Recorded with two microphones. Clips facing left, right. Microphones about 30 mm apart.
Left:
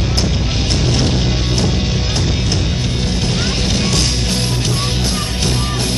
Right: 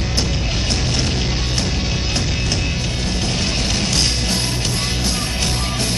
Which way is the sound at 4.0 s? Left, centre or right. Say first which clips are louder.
Left 2 dB; centre.